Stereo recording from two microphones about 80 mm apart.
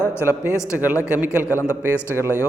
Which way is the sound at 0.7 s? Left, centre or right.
Right.